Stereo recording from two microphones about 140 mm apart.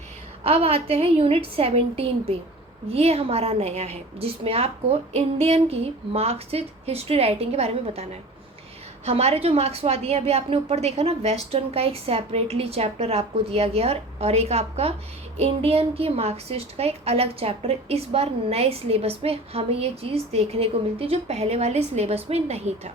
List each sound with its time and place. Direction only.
0.4 s a woman's voice: 45° right (ahead or behind)
9.0 s a woman's voice: 45° right (ahead or behind)